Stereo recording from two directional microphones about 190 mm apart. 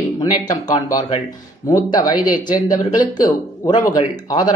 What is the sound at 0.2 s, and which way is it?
Speech, 20° left (ahead or behind).